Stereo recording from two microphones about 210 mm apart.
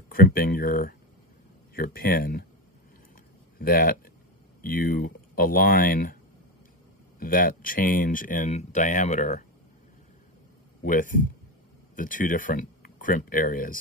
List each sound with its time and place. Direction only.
0.1 s speech: 45° left (ahead or behind)
3.5 s speech: 45° left (ahead or behind)
7.2 s speech: 45° left (ahead or behind)
10.8 s speech: 40° left (ahead or behind)